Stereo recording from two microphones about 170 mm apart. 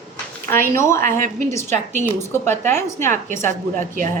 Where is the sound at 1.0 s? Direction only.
55° right (ahead or behind).